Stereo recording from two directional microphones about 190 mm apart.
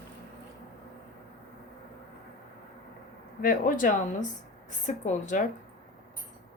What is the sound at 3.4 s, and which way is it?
Speech, 50° left (ahead or behind).